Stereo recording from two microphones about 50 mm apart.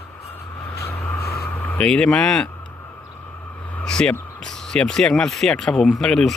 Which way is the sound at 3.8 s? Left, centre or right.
Centre.